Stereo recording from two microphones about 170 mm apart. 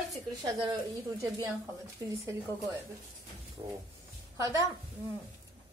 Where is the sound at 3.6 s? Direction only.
30° right (ahead or behind).